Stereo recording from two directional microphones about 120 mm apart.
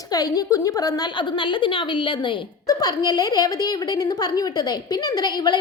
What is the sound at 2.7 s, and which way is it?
A woman's voice, 35° left (ahead or behind).